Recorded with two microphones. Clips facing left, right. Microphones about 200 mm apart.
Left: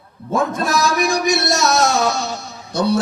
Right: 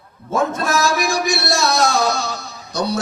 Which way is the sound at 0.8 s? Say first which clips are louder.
Left 2 dB; 20° left (ahead or behind).